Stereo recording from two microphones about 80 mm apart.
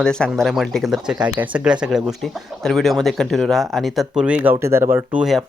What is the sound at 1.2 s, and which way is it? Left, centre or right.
Speech, centre.